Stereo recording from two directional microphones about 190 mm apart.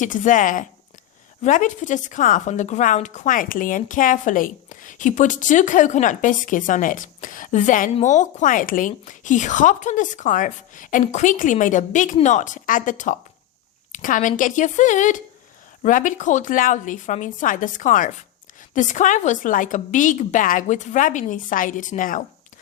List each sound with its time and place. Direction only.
0.0 s a woman's voice: 45° left (ahead or behind)